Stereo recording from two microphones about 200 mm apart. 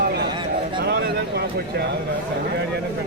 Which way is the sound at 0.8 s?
55° right (ahead or behind).